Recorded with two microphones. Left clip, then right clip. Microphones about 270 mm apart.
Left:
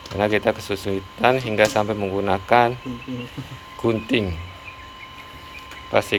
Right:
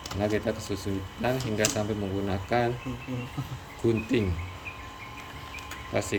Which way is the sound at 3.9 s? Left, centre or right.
Centre.